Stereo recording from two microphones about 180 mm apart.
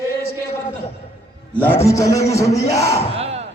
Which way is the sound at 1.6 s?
15° left (ahead or behind).